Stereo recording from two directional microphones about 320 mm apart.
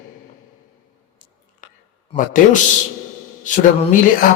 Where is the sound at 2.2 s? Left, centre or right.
Left.